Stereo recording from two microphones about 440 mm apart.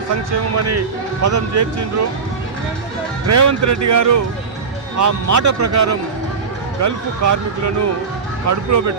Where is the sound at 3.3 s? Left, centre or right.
Right.